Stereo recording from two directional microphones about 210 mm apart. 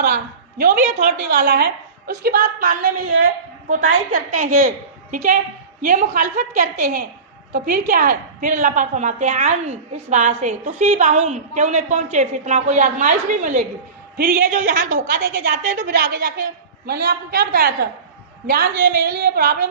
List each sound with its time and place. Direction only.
0.6 s a woman's voice: 35° right (ahead or behind)
1.4 s a woman's voice: 50° right (ahead or behind)